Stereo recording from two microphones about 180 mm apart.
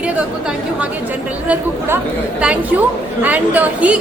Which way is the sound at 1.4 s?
10° right (ahead or behind).